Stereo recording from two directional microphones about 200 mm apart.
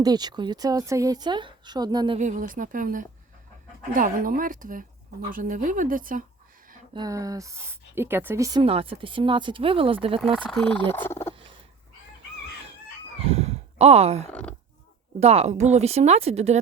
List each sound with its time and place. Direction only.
0.0 s a woman's voice: 20° right (ahead or behind)
2.1 s speech: 40° right (ahead or behind)
6.9 s a woman's voice: 20° right (ahead or behind)
10.3 s speech: 5° left (ahead or behind)
13.1 s a sound: 30° right (ahead or behind)
15.2 s speech: 30° right (ahead or behind)